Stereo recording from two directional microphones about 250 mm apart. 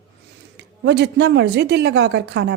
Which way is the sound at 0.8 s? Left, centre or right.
Right.